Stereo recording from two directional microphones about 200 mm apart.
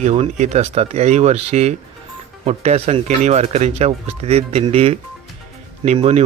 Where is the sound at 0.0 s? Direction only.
35° right (ahead or behind).